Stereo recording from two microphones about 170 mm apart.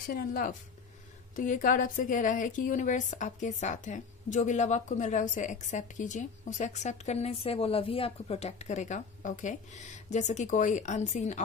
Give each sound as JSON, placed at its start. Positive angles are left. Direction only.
{"t": 0.0, "sound": "speech", "side_deg": 55}